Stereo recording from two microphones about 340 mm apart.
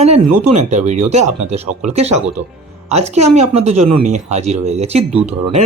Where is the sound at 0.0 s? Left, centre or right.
Centre.